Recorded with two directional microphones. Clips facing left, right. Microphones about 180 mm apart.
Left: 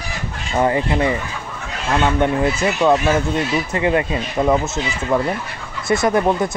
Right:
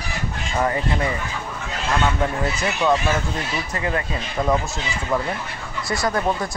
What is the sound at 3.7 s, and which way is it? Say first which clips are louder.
Speech: left 7 dB; 25° left (ahead or behind).